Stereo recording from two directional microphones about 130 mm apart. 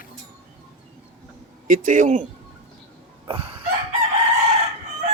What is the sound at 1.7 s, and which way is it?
Speech, 90° right.